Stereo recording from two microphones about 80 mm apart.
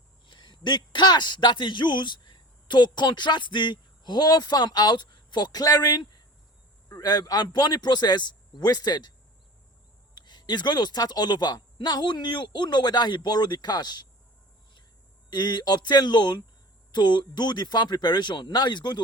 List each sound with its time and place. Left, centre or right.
0.3 s a man's voice: left
10.2 s speech: left
15.3 s speech: left